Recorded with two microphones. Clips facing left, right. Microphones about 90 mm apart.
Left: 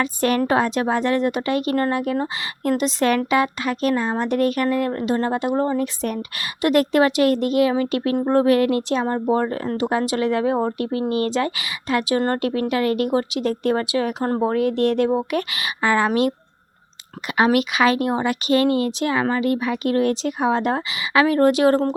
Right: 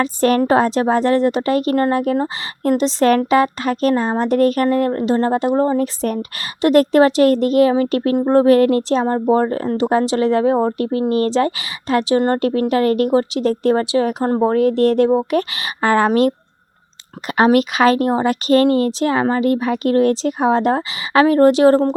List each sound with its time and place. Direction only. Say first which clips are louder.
0.0 s speech: right 5 dB; 35° right (ahead or behind)
8.1 s speech: right 5 dB; 25° right (ahead or behind)
14.4 s speech: right 5 dB; 35° right (ahead or behind)
17.3 s speech: right 4 dB; 40° right (ahead or behind)